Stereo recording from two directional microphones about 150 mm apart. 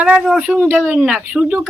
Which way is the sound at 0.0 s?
10° right (ahead or behind).